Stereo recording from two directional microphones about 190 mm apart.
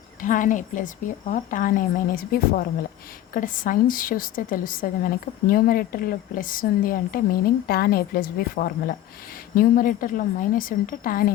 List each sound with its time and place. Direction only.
0.2 s a woman's voice: 45° left (ahead or behind)